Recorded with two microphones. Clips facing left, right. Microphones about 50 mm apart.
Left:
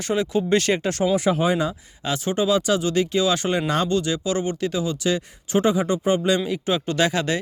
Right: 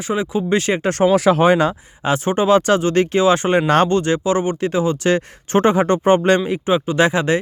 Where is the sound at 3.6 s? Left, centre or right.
Right.